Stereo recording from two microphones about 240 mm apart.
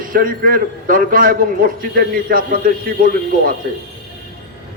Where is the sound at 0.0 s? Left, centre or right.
Right.